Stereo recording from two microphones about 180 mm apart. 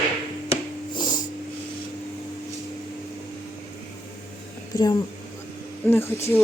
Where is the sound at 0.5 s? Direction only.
25° left (ahead or behind).